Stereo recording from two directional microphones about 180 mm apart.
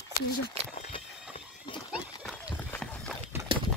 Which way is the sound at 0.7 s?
35° left (ahead or behind).